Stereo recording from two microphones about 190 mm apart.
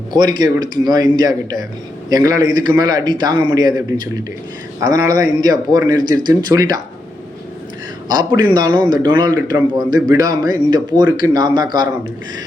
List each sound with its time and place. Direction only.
0.1 s speech: 20° right (ahead or behind)
8.0 s a man's voice: 20° right (ahead or behind)